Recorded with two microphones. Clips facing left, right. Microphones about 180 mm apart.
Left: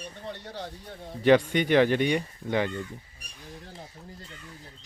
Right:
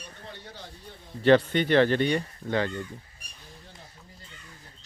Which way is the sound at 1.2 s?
10° left (ahead or behind).